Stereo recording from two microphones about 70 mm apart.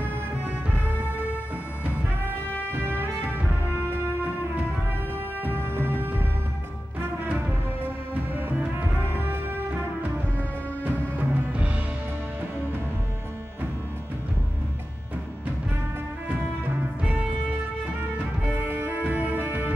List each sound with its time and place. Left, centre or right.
2.7 s music: right
5.4 s music: right
10.8 s music: right
18.7 s music: right